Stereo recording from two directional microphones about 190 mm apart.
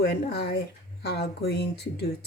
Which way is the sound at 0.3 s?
60° left (ahead or behind).